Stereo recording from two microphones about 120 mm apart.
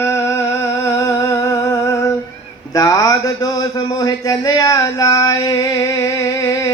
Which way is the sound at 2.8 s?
30° left (ahead or behind).